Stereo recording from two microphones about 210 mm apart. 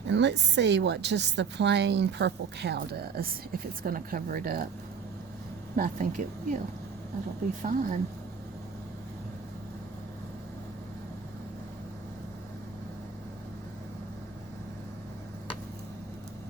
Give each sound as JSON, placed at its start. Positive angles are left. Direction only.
{"t": 0.1, "sound": "a woman's voice", "side_deg": -55}
{"t": 5.7, "sound": "a woman's voice", "side_deg": -40}
{"t": 7.6, "sound": "a woman's voice", "side_deg": -40}